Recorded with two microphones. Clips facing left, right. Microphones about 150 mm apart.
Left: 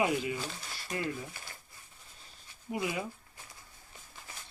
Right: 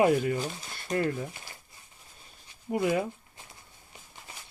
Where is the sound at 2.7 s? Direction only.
50° right (ahead or behind).